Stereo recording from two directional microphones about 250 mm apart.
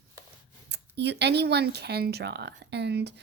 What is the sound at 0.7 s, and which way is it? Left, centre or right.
A woman's voice, right.